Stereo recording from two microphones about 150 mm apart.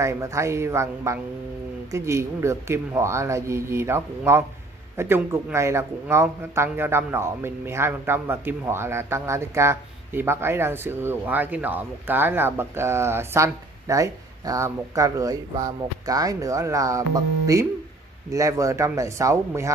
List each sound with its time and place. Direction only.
0.0 s speech: 20° right (ahead or behind)